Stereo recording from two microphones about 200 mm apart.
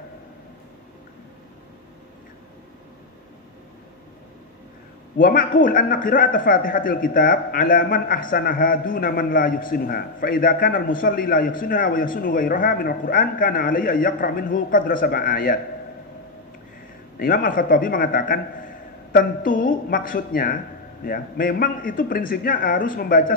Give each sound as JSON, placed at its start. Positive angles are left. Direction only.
{"t": 5.1, "sound": "a man's voice", "side_deg": 45}
{"t": 17.2, "sound": "a man's voice", "side_deg": 45}